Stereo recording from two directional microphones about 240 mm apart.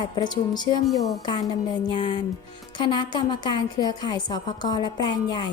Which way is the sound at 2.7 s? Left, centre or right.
Centre.